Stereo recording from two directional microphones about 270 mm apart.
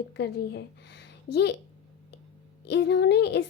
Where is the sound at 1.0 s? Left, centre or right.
Left.